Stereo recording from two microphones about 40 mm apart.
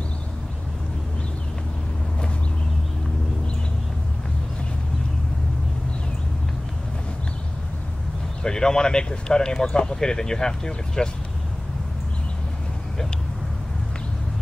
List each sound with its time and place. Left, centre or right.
8.4 s speech: centre